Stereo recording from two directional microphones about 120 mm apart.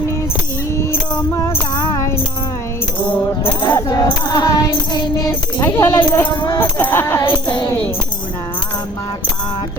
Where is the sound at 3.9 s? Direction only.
30° left (ahead or behind).